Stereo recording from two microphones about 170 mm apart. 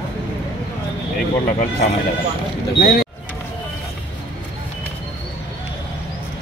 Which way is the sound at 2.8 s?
65° left (ahead or behind).